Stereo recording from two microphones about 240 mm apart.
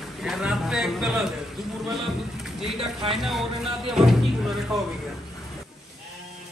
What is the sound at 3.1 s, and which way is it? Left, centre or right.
Speech, centre.